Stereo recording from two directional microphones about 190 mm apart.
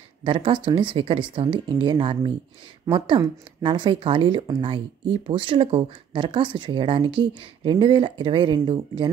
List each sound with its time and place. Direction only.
0.2 s speech: 25° right (ahead or behind)